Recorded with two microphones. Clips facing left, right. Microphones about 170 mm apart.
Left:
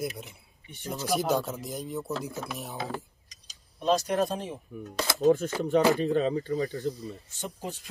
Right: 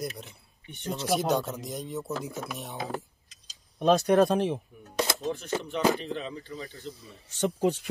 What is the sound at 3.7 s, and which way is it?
Speech, 60° right (ahead or behind).